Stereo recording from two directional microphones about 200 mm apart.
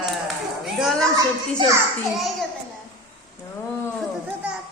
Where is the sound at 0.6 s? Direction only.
Centre (ahead or behind).